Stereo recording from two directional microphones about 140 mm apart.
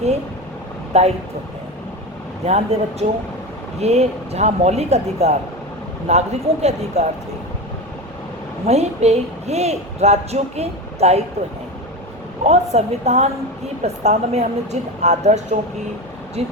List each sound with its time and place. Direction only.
0.9 s a woman's voice: 50° right (ahead or behind)
2.5 s a woman's voice: 50° right (ahead or behind)
8.6 s a woman's voice: 50° right (ahead or behind)
12.5 s a woman's voice: 50° right (ahead or behind)
16.4 s a woman's voice: 45° right (ahead or behind)